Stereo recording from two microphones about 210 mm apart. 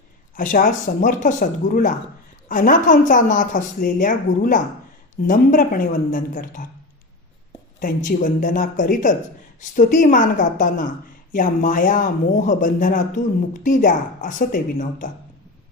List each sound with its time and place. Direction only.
0.3 s a woman's voice: 40° left (ahead or behind)
7.8 s a woman's voice: 40° left (ahead or behind)